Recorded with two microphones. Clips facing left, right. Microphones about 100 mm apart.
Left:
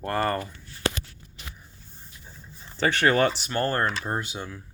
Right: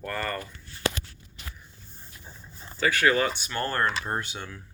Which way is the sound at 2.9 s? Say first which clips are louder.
Left 2 dB; 30° left (ahead or behind).